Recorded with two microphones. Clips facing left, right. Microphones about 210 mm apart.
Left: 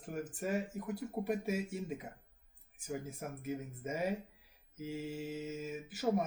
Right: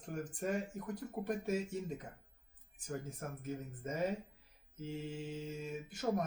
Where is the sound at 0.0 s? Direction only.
5° left (ahead or behind).